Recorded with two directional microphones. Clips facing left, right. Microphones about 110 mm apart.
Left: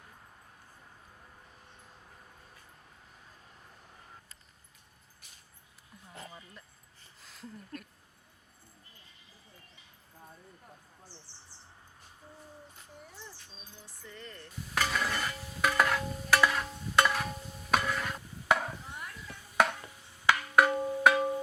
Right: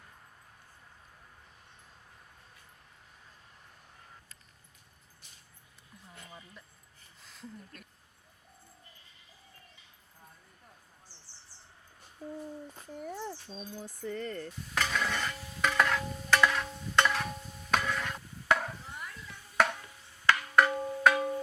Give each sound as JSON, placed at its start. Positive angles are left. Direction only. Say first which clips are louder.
{"t": 6.3, "sound": "a sound", "louder": "even", "side_deg": 0}
{"t": 7.2, "sound": "speech", "louder": "even", "side_deg": 0}
{"t": 13.0, "sound": "speech", "louder": "right 13 dB", "side_deg": -55}
{"t": 14.8, "sound": "a sound", "louder": "even", "side_deg": 5}
{"t": 17.7, "sound": "stir", "louder": "left 1 dB", "side_deg": 5}
{"t": 20.2, "sound": "music", "louder": "even", "side_deg": 10}